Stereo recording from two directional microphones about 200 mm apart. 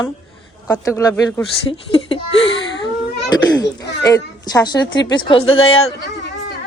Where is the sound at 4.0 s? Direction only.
20° left (ahead or behind).